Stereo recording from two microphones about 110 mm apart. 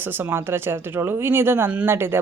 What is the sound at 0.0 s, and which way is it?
Speech, 20° right (ahead or behind).